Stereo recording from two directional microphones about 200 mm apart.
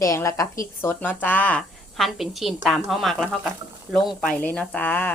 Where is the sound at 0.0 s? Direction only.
15° left (ahead or behind).